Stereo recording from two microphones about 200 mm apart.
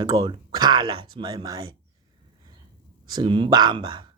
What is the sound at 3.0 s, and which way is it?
Speech, 25° right (ahead or behind).